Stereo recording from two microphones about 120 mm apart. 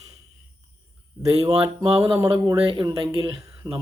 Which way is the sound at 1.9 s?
50° right (ahead or behind).